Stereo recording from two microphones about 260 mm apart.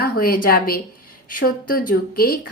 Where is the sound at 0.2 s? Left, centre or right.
Left.